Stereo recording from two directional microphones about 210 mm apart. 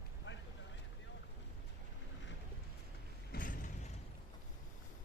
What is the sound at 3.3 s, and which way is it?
Mechanisms, 40° left (ahead or behind).